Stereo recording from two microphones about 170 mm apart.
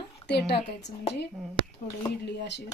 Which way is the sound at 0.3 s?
80° left.